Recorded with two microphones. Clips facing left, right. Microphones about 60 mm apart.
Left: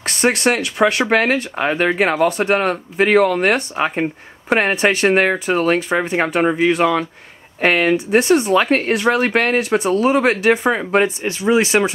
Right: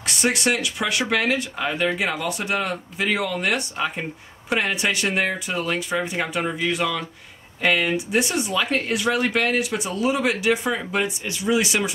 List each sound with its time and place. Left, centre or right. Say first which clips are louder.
0.0 s speech: left 6 dB; left